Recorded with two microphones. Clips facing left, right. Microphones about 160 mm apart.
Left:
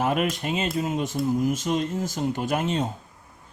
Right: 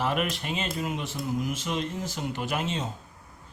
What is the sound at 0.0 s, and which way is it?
Speech, 45° left (ahead or behind).